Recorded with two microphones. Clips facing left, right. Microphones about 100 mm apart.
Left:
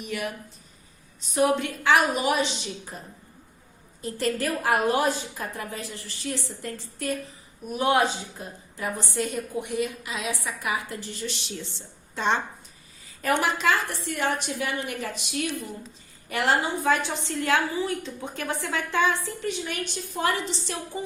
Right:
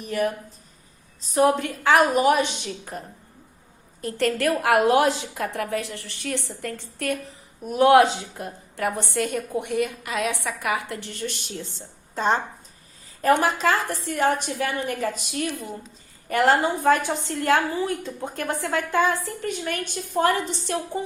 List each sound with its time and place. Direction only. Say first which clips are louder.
0.0 s a woman's voice: right 7 dB; 35° right (ahead or behind); by 3.0 s 55° right (ahead or behind)
4.0 s a woman's voice: right 4 dB; 60° right (ahead or behind)
7.7 s a woman's voice: right 7 dB; 75° right (ahead or behind); by 21.0 s 55° right (ahead or behind)